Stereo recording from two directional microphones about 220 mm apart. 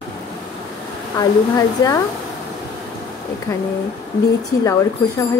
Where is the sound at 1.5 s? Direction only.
15° left (ahead or behind).